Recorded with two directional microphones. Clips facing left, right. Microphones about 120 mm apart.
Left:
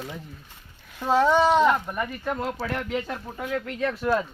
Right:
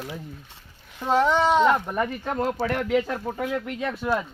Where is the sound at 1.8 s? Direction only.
25° right (ahead or behind).